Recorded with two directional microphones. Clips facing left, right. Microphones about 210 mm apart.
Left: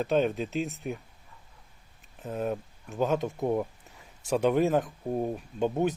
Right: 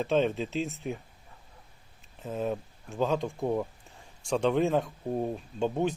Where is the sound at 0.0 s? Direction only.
Centre (ahead or behind).